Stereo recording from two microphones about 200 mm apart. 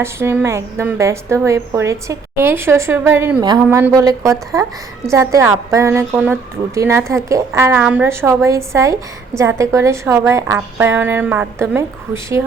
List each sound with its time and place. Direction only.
0.0 s a woman's voice: 10° right (ahead or behind)